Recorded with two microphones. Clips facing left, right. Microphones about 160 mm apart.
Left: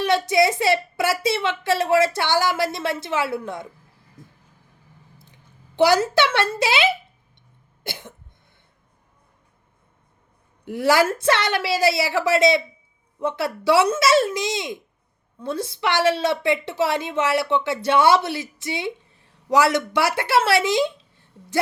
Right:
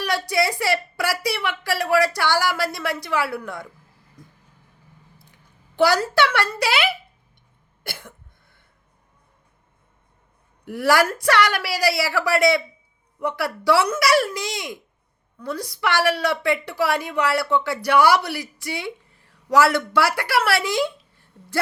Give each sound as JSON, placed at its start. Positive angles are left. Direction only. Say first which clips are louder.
{"t": 0.0, "sound": "a woman's voice", "louder": "left 4 dB", "side_deg": 20}
{"t": 4.2, "sound": "vehicle", "louder": "left 1 dB", "side_deg": 25}
{"t": 5.2, "sound": "speech", "louder": "left 2 dB", "side_deg": 20}
{"t": 7.9, "sound": "cough", "louder": "left 2 dB", "side_deg": 20}
{"t": 10.7, "sound": "a woman's voice", "louder": "left 1 dB", "side_deg": 20}